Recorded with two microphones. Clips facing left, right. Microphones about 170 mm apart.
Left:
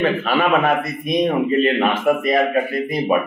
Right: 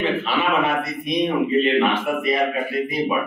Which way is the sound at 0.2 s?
50° left (ahead or behind).